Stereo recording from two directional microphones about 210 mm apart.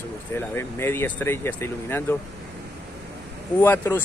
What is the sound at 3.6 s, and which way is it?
Speech, 10° left (ahead or behind).